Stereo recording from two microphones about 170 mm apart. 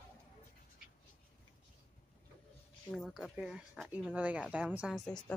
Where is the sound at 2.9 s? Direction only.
5° left (ahead or behind).